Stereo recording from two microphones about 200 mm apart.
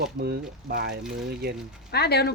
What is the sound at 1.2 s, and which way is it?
Speech, 50° right (ahead or behind).